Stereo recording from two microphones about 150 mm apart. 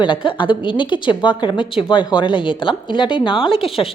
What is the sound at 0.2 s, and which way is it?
A woman's voice, 35° left (ahead or behind).